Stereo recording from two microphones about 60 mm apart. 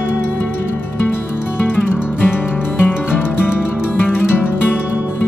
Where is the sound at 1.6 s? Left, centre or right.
Left.